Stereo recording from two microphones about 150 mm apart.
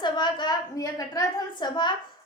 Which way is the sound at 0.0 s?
30° left (ahead or behind).